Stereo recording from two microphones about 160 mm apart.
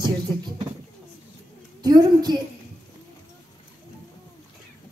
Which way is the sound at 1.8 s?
25° right (ahead or behind).